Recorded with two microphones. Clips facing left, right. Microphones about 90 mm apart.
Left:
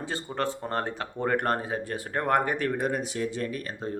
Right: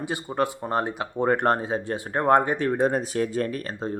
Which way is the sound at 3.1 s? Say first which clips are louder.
Right 5 dB; 45° right (ahead or behind).